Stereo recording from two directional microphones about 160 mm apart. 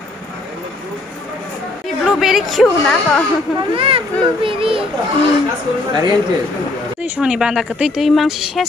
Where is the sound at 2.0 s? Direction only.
Centre (ahead or behind).